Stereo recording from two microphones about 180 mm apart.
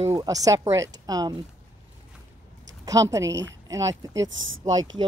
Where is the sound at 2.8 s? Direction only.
20° right (ahead or behind).